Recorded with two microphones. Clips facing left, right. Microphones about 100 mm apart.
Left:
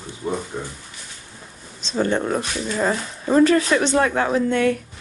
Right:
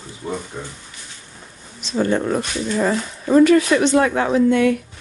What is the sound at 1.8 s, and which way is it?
Speech, 30° left (ahead or behind).